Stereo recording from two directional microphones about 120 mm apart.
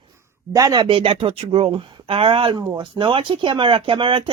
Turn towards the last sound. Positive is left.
turn(degrees=-45)  # may be behind; listen again after turning